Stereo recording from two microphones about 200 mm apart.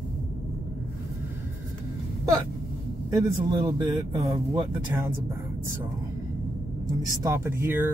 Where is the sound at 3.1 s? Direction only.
20° right (ahead or behind).